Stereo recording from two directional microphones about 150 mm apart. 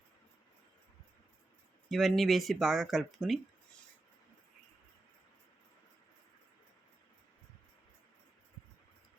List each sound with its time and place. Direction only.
1.9 s speech: centre (ahead or behind)